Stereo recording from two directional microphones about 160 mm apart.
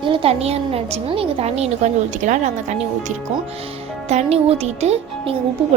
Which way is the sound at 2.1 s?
50° right (ahead or behind).